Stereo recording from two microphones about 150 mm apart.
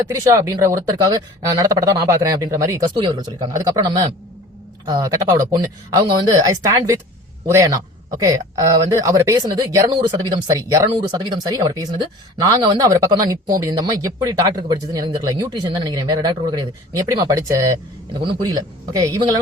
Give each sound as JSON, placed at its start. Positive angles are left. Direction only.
{"t": 0.1, "sound": "speech", "side_deg": -20}
{"t": 18.1, "sound": "speech", "side_deg": -35}